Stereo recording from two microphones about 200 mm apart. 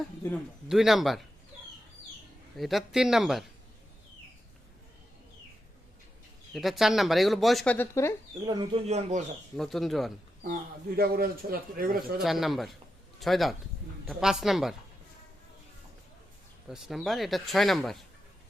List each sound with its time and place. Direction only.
0.7 s speech: centre (ahead or behind)
2.6 s speech: centre (ahead or behind)
6.5 s speech: centre (ahead or behind)
8.4 s speech: 20° right (ahead or behind)
8.9 s speech: 35° right (ahead or behind)
9.6 s speech: centre (ahead or behind)
10.4 s speech: 45° right (ahead or behind)
12.2 s speech: centre (ahead or behind)
16.6 s speech: centre (ahead or behind)